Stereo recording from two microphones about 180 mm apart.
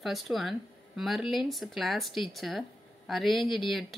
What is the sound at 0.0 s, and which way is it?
Speech, centre (ahead or behind).